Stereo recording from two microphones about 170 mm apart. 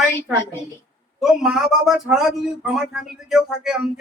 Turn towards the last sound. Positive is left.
turn(degrees=-5)  # may be behind; listen again after turning